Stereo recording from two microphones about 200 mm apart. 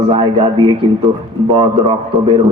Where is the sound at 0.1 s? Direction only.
25° right (ahead or behind).